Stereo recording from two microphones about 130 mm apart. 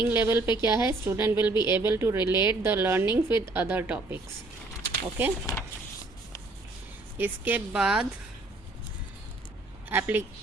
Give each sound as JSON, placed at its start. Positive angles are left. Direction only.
{"t": 0.0, "sound": "a woman's voice", "side_deg": -15}
{"t": 5.2, "sound": "a woman's voice", "side_deg": -15}
{"t": 7.2, "sound": "a woman's voice", "side_deg": -10}
{"t": 9.9, "sound": "a woman's voice", "side_deg": -15}